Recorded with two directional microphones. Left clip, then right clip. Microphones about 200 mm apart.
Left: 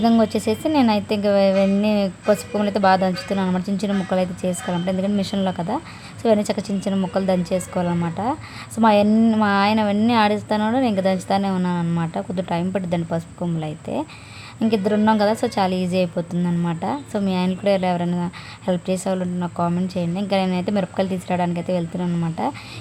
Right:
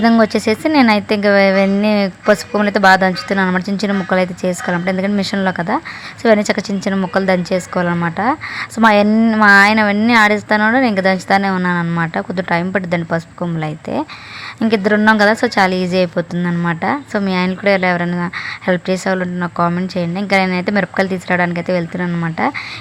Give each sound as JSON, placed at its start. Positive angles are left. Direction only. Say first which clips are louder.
{"t": 0.0, "sound": "a woman's voice", "louder": "right 6 dB", "side_deg": -15}